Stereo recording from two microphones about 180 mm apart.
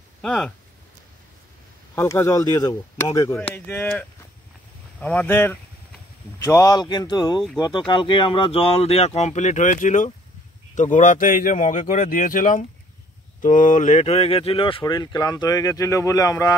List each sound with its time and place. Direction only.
0.2 s speech: 5° left (ahead or behind)
2.0 s speech: 15° left (ahead or behind)
5.0 s speech: 10° left (ahead or behind)